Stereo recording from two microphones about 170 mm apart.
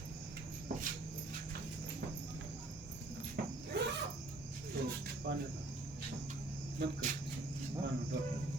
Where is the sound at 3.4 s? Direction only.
75° right (ahead or behind).